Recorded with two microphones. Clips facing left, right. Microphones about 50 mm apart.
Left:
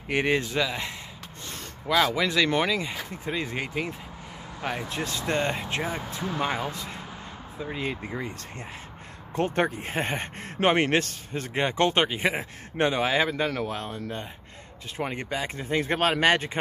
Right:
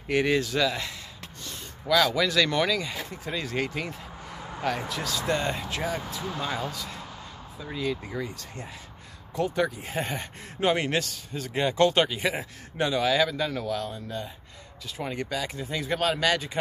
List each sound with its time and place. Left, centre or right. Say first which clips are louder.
0.1 s speech: right 1 dB; left
4.8 s speech: right 1 dB; left
9.3 s speech: left 1 dB; left